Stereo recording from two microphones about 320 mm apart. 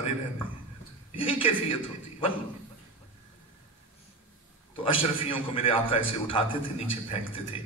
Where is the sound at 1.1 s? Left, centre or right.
Centre.